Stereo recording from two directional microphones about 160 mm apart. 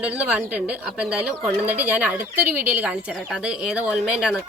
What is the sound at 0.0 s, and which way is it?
Speech, 5° right (ahead or behind).